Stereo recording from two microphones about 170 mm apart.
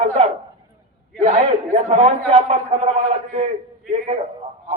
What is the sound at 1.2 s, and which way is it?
A man's voice, 35° right (ahead or behind).